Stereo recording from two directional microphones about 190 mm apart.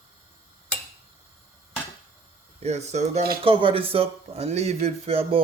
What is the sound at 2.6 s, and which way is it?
A man's voice, 35° right (ahead or behind).